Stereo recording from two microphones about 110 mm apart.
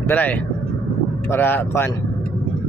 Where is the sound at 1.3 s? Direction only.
20° left (ahead or behind).